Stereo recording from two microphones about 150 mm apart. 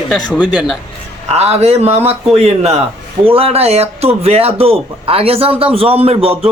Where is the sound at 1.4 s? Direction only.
45° right (ahead or behind).